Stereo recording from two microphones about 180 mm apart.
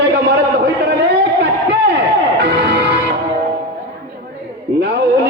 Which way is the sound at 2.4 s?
70° right (ahead or behind).